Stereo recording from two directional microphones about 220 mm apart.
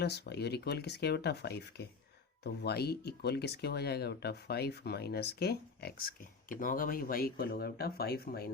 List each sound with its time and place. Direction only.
0.0 s speech: 50° left (ahead or behind)